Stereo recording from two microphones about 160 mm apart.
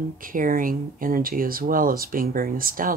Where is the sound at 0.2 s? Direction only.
60° right (ahead or behind).